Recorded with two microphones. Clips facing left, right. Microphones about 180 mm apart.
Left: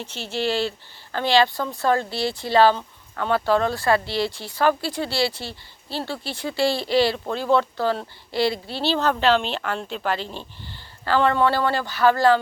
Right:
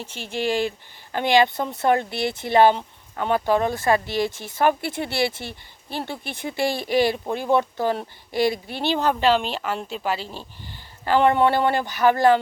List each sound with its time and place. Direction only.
0.0 s speech: 10° right (ahead or behind)